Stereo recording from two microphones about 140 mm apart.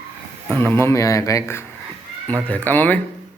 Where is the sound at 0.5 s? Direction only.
15° left (ahead or behind).